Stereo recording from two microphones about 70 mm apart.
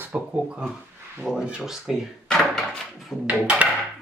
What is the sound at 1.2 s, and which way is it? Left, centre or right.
Speech, centre.